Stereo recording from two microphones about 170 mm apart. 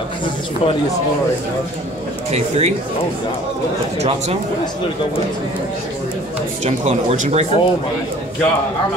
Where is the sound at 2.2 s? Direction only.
40° right (ahead or behind).